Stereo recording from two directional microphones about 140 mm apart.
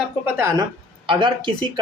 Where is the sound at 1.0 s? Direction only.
35° right (ahead or behind).